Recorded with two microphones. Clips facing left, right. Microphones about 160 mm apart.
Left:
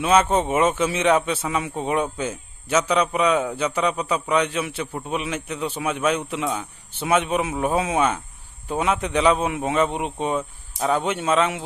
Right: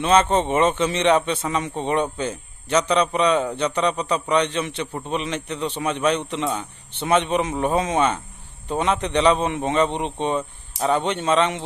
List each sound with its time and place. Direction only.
0.0 s a man's voice: 5° left (ahead or behind)